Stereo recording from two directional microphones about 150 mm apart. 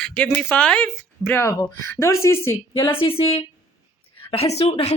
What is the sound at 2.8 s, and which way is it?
Speech, 35° left (ahead or behind).